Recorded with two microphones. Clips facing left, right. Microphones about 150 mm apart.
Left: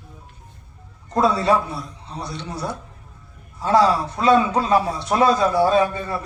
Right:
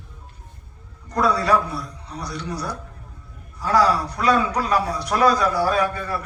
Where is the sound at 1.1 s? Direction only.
25° left (ahead or behind).